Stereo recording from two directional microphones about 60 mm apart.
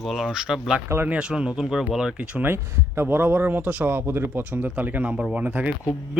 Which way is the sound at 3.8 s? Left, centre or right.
Right.